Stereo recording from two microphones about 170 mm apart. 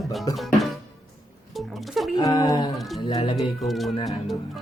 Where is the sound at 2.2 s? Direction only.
20° left (ahead or behind).